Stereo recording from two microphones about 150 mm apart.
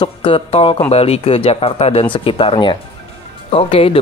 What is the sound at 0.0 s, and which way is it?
Speech, 35° left (ahead or behind).